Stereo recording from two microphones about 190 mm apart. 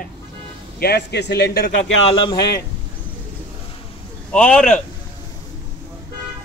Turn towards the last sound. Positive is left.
turn(degrees=5)  # may be behind; listen again after turning